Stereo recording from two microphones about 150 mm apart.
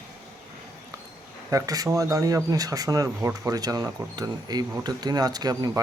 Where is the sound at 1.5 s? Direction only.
20° right (ahead or behind).